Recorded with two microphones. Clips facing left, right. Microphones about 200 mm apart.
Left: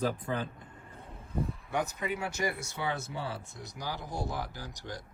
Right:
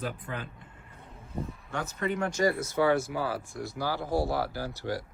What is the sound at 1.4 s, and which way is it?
Speech, 15° left (ahead or behind).